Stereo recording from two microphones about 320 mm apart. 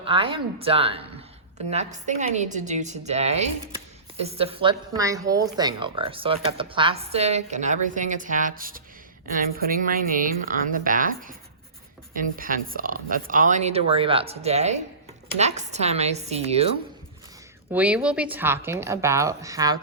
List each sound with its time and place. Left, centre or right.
0.0 s a woman's voice: centre
17.7 s a woman's voice: centre